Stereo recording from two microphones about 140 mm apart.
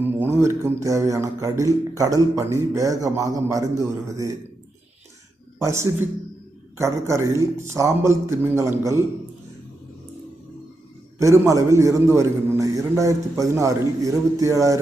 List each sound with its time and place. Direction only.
0.0 s speech: 15° right (ahead or behind)
5.5 s a man's voice: 20° right (ahead or behind)
11.2 s speech: 20° right (ahead or behind)